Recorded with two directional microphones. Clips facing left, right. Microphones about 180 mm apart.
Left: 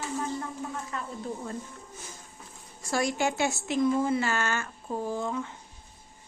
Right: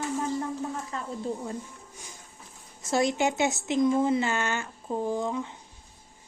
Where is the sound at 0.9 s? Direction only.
30° right (ahead or behind).